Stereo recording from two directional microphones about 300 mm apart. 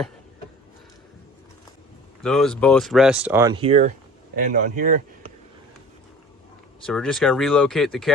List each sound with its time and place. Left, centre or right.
2.2 s speech: centre; by 5.3 s right
6.8 s speech: centre